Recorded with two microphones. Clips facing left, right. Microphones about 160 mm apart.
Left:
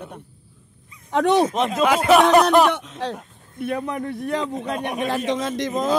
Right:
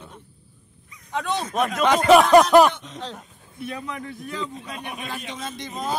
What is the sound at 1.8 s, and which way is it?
Speech, 5° left (ahead or behind).